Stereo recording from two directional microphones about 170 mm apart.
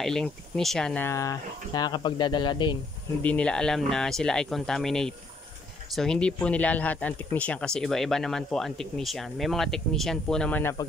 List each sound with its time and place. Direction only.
0.0 s speech: 5° left (ahead or behind); by 2.8 s 25° left (ahead or behind)
3.2 s speech: 10° left (ahead or behind)